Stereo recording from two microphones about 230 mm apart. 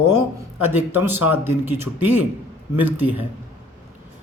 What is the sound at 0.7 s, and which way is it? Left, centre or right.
A man's voice, centre.